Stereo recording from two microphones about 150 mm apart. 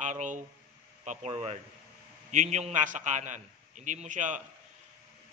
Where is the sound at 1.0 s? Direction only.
50° right (ahead or behind).